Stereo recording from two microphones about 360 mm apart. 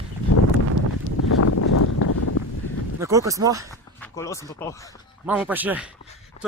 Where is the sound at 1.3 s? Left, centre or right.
Left.